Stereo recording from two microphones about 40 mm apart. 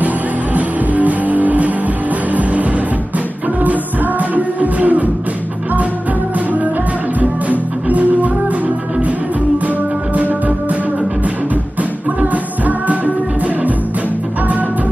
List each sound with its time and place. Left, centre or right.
0.6 s music: right
3.6 s music: right
7.2 s music: right
12.2 s music: right